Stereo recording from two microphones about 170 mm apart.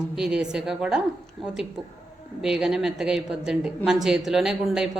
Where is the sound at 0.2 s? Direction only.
5° right (ahead or behind).